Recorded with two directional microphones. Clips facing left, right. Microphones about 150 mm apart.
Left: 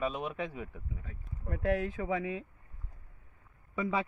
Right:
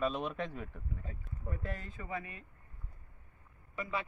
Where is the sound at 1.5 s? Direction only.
70° left (ahead or behind); by 2.3 s 90° left.